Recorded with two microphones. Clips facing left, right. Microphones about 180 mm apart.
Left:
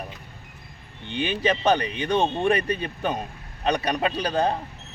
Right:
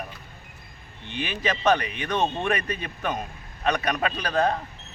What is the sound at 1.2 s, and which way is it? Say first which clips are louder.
A man's voice: left 4 dB; 30° left (ahead or behind).